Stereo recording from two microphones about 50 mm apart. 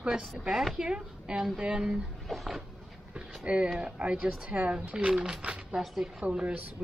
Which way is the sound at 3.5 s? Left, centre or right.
Centre.